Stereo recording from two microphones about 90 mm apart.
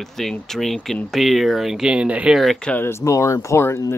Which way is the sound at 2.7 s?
25° left (ahead or behind).